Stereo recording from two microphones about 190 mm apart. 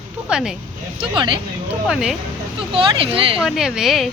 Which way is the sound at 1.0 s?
25° right (ahead or behind).